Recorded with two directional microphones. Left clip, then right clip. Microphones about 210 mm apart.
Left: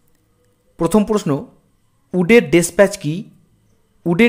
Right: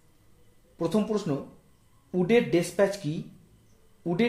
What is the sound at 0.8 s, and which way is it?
Speech, 40° left (ahead or behind).